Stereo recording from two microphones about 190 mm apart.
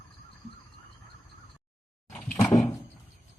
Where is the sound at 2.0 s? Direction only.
10° left (ahead or behind).